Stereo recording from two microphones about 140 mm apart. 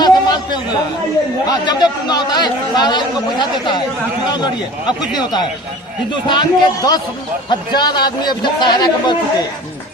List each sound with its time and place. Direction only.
0.0 s a sound: 30° left (ahead or behind)
1.5 s a man's voice: 30° left (ahead or behind)
4.9 s a man's voice: 30° left (ahead or behind)